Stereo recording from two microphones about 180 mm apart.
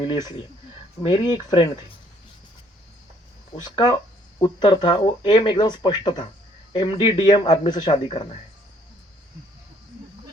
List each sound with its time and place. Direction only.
0.0 s speech: 25° left (ahead or behind)
3.6 s speech: 20° left (ahead or behind)